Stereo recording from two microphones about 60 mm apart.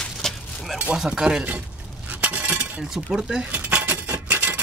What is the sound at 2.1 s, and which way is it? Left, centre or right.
Chink, right.